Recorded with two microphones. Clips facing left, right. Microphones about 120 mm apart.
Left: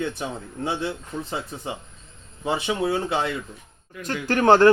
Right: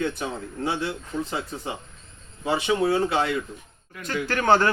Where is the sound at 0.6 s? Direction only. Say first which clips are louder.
Even; 25° left (ahead or behind).